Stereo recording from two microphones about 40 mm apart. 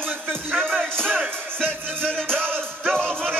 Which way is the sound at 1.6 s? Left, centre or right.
Left.